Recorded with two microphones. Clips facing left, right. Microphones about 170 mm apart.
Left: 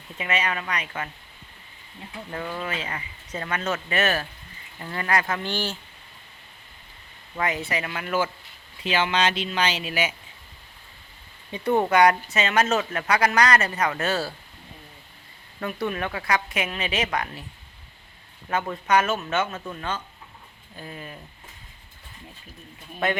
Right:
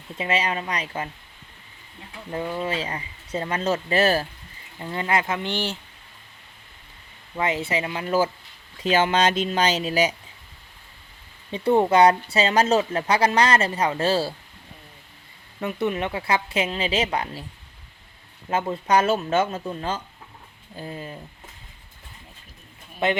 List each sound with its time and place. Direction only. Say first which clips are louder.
0.2 s speech: right 3 dB; 30° right (ahead or behind)
2.6 s speech: right 4 dB; 30° right (ahead or behind)
4.8 s speech: right 1 dB; 20° right (ahead or behind)
7.3 s speech: right 3 dB; 25° right (ahead or behind)
8.8 s speech: right 4 dB; 40° right (ahead or behind)
11.5 s speech: right 3 dB; 30° right (ahead or behind)
15.6 s speech: right 3 dB; 20° right (ahead or behind)
18.4 s speech: right 2 dB; 25° right (ahead or behind)
23.0 s speech: right 2 dB; 20° right (ahead or behind)